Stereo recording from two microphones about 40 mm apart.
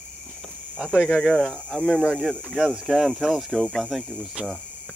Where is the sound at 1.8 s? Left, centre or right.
Centre.